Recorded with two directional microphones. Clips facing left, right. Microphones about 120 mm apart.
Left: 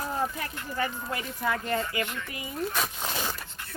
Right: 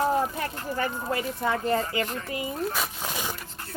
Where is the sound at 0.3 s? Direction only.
35° right (ahead or behind).